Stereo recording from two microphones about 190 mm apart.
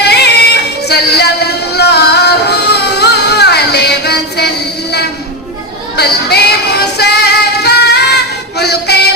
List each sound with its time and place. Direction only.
0.0 s music: 60° left (ahead or behind)